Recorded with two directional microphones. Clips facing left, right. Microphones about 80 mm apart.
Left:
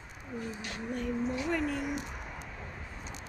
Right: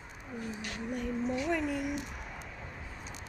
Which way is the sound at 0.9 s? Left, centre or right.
Centre.